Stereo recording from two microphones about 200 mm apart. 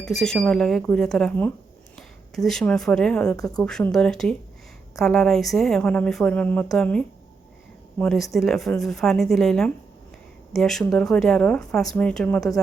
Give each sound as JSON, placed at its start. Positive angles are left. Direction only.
{"t": 0.0, "sound": "a woman's voice", "side_deg": 0}